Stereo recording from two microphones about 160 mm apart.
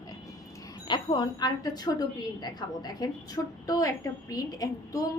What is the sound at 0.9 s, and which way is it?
A woman's voice, 30° left (ahead or behind).